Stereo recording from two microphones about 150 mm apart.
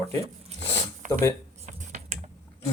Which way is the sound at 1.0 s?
55° right (ahead or behind).